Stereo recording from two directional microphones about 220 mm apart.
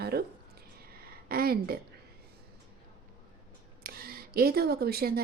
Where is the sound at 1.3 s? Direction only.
45° right (ahead or behind).